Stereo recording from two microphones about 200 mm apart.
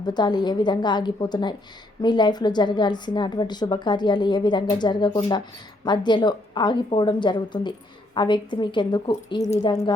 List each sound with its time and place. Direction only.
0.0 s a woman's voice: 20° left (ahead or behind)